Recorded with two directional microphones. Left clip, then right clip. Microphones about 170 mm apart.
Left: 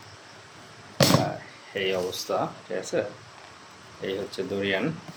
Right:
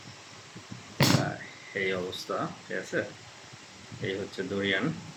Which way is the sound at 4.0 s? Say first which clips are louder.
Left 3 dB; 15° right (ahead or behind).